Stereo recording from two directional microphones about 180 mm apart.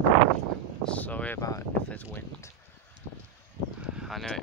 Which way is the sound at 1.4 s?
20° left (ahead or behind).